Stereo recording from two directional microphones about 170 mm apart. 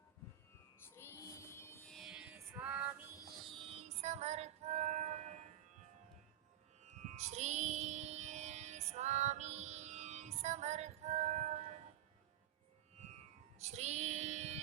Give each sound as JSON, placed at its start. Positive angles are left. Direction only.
{"t": 0.9, "sound": "music", "side_deg": 15}
{"t": 1.9, "sound": "music", "side_deg": 0}
{"t": 3.7, "sound": "music", "side_deg": -40}
{"t": 6.8, "sound": "music", "side_deg": -45}
{"t": 13.6, "sound": "child singing", "side_deg": -40}